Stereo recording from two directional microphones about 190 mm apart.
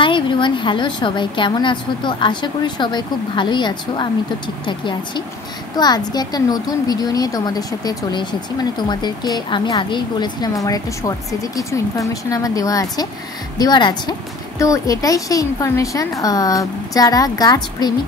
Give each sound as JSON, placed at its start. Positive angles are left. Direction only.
{"t": 0.0, "sound": "a woman's voice", "side_deg": 25}